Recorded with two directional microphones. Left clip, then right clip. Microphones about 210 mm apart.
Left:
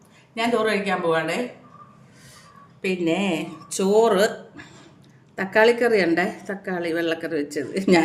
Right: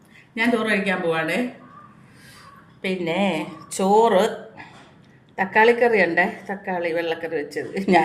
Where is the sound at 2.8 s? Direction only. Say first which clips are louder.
Even; 35° left (ahead or behind).